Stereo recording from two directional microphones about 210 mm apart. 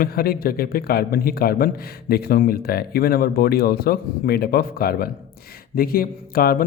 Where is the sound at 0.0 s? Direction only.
45° left (ahead or behind).